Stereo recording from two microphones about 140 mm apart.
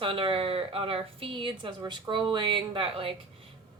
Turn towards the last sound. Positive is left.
turn(degrees=-40)  # may be behind; listen again after turning